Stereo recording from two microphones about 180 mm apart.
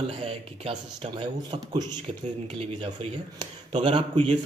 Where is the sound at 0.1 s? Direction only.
35° right (ahead or behind).